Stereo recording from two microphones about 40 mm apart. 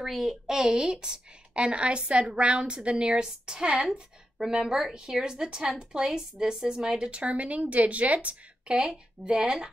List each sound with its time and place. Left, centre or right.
0.0 s a woman's voice: centre; by 8.7 s right
8.7 s a woman's voice: right